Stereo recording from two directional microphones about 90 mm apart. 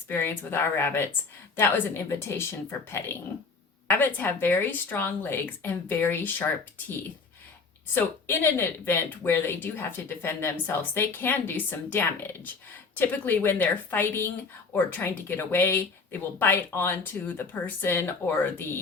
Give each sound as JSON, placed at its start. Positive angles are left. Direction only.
{"t": 0.1, "sound": "speech", "side_deg": 25}
{"t": 7.9, "sound": "speech", "side_deg": 25}